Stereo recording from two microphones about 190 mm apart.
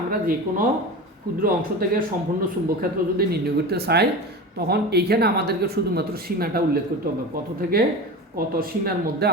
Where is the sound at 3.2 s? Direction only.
55° right (ahead or behind).